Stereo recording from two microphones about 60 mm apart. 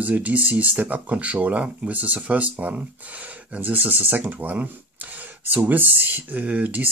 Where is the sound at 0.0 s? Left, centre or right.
Right.